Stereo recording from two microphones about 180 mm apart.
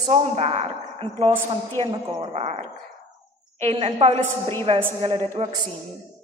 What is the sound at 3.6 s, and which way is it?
A woman's voice, 30° right (ahead or behind).